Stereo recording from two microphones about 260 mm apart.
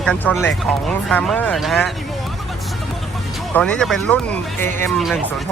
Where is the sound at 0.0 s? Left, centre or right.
Centre.